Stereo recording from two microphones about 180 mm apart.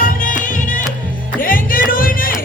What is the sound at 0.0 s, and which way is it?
Music, 50° left (ahead or behind).